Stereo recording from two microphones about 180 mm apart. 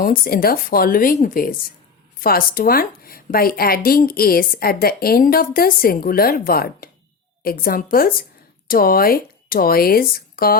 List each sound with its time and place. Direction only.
0.0 s a woman's voice: 50° left (ahead or behind)